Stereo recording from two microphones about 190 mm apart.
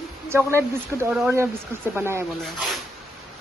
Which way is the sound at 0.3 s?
15° right (ahead or behind).